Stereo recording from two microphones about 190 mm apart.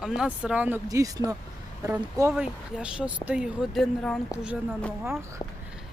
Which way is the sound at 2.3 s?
5° right (ahead or behind).